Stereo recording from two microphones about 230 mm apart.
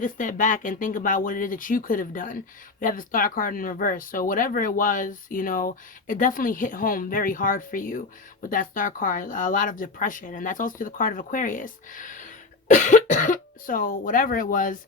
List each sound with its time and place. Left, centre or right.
0.0 s speech: left